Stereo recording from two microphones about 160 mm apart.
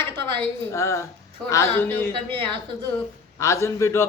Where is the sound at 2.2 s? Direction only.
35° right (ahead or behind).